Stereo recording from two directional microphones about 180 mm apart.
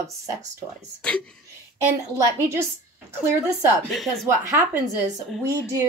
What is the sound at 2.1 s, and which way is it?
A woman's voice, 15° right (ahead or behind).